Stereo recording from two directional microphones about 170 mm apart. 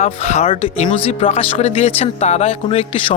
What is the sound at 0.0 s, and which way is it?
Speech, 40° left (ahead or behind).